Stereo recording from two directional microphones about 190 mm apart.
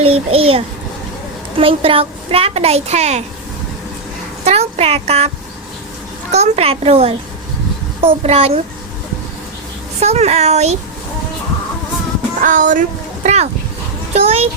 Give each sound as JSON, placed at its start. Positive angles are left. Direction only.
{"t": 0.0, "sound": "a woman's voice", "side_deg": -30}
{"t": 4.4, "sound": "speech", "side_deg": -35}
{"t": 6.3, "sound": "a woman's voice", "side_deg": -35}
{"t": 10.0, "sound": "a woman's voice", "side_deg": -35}
{"t": 12.4, "sound": "speech", "side_deg": -45}
{"t": 13.2, "sound": "a sound", "side_deg": -35}
{"t": 14.1, "sound": "a woman's voice", "side_deg": -35}